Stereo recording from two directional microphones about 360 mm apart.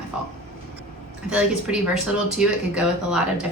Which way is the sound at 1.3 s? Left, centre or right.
Centre.